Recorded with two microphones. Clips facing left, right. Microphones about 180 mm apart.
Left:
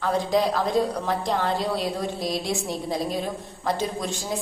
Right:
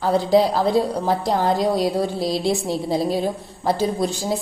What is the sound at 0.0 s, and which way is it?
A woman's voice, 35° right (ahead or behind).